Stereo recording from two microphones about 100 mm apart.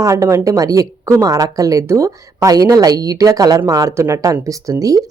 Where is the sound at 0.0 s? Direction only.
30° right (ahead or behind).